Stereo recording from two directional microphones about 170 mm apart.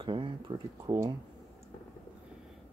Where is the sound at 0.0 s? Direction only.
30° right (ahead or behind).